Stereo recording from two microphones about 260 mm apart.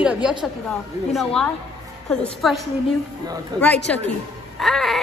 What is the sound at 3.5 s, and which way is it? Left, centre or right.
Speech, centre.